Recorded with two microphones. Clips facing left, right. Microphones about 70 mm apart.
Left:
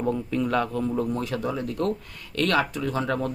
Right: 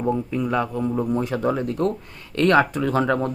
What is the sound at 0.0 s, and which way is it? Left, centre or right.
A man's voice, centre.